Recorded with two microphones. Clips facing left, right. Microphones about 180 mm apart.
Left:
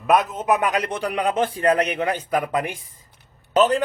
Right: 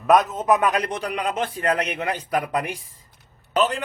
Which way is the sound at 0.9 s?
30° left (ahead or behind).